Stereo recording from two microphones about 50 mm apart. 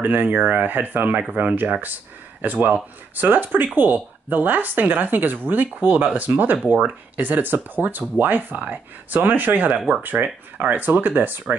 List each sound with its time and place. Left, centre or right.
0.0 s speech: right